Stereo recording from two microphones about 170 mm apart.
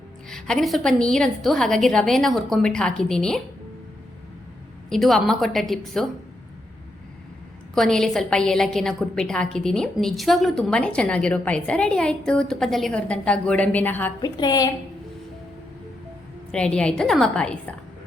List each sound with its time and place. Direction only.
0.3 s a woman's voice: 5° left (ahead or behind)
4.9 s a woman's voice: centre (ahead or behind)
7.8 s a woman's voice: 5° left (ahead or behind)
14.2 s a woman's voice: 25° left (ahead or behind)
16.5 s a woman's voice: 5° left (ahead or behind)